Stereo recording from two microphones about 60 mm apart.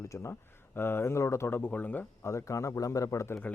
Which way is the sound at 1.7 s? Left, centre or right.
Left.